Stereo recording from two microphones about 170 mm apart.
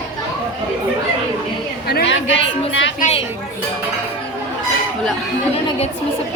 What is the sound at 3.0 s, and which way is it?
Speech, 35° left (ahead or behind).